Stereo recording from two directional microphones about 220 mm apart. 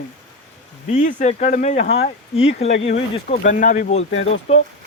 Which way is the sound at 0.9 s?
35° left (ahead or behind).